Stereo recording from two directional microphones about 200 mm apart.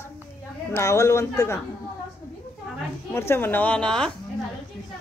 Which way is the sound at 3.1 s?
10° left (ahead or behind).